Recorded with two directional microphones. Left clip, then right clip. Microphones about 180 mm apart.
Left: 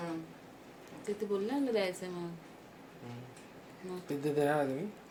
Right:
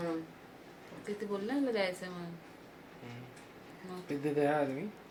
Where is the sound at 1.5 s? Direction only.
30° left (ahead or behind).